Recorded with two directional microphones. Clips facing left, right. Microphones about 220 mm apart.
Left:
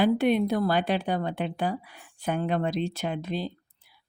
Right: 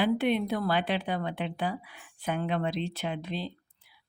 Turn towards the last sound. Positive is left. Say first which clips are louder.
# left 3 dB
turn(degrees=45)  # may be behind; listen again after turning